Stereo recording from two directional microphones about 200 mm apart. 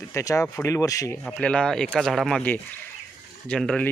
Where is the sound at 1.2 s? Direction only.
5° left (ahead or behind).